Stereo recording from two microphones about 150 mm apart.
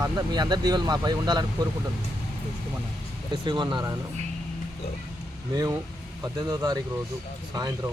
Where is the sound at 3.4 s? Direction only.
30° right (ahead or behind).